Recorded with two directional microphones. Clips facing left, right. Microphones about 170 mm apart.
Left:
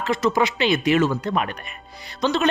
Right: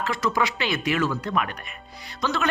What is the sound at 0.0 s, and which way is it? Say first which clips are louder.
Speech: left 4 dB; 20° left (ahead or behind).